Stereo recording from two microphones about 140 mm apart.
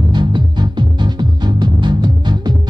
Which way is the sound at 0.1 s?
30° right (ahead or behind).